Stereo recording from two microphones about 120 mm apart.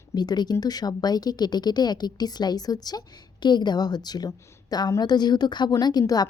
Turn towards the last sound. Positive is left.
turn(degrees=35)  # may be behind; listen again after turning